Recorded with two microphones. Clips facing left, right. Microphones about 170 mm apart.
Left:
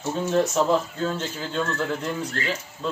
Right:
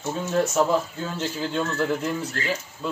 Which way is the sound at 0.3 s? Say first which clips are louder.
Even; centre (ahead or behind).